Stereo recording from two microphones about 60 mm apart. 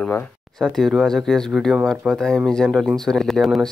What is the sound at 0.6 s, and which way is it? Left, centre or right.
Speech, centre.